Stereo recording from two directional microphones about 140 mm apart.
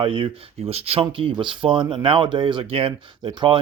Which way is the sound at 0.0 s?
40° right (ahead or behind).